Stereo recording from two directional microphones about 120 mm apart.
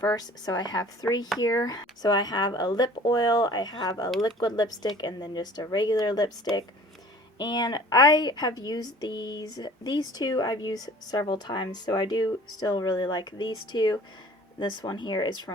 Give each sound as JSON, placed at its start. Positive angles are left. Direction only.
{"t": 0.0, "sound": "a woman's voice", "side_deg": 30}